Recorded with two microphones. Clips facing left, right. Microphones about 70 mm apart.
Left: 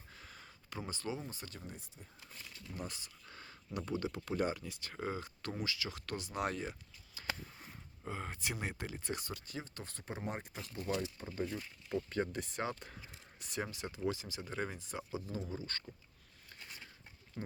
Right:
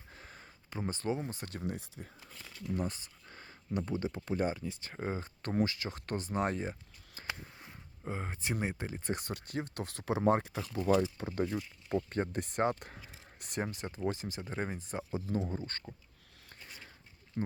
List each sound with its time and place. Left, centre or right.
0.1 s a sound: right
0.9 s speech: right
1.2 s speech: right
1.6 s speech: right
2.7 s a sound: right
3.8 s speech: right
8.0 s speech: right
9.0 s speech: right
10.8 s speech: right
11.9 s speech: right